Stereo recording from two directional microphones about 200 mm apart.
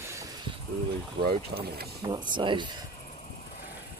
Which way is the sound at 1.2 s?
50° right (ahead or behind).